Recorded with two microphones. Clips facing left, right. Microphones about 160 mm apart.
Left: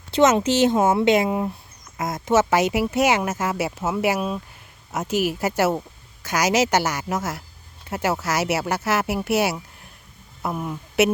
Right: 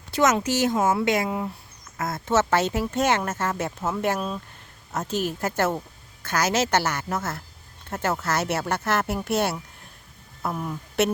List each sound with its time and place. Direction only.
0.1 s speech: 25° left (ahead or behind); by 11.1 s 10° left (ahead or behind)